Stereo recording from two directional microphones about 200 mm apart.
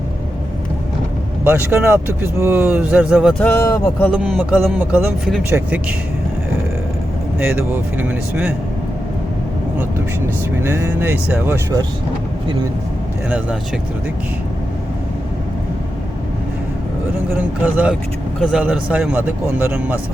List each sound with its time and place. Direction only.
1.5 s speech: 10° right (ahead or behind)
3.3 s speech: 5° left (ahead or behind)
4.1 s speech: 5° right (ahead or behind)
7.3 s speech: 10° right (ahead or behind)
10.6 s speech: 10° right (ahead or behind)
17.3 s speech: 10° right (ahead or behind)